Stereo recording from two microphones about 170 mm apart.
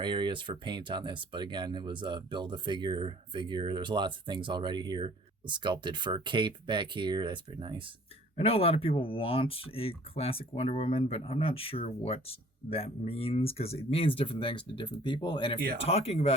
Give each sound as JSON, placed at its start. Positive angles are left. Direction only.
{"t": 0.0, "sound": "speech", "side_deg": -25}
{"t": 8.4, "sound": "speech", "side_deg": 35}